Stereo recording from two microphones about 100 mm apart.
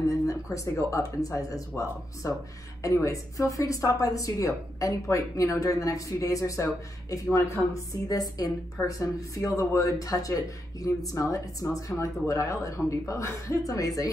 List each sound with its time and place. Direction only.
0.0 s speech: 30° left (ahead or behind)